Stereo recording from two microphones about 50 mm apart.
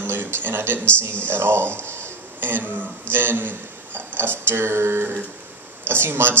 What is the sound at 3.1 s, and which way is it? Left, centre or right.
Speech, right.